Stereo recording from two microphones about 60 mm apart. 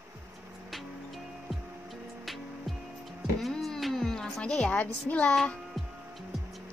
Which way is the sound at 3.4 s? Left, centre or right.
Centre.